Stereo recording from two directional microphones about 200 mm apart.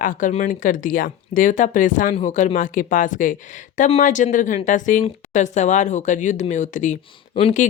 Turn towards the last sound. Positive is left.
turn(degrees=35)  # may be behind; listen again after turning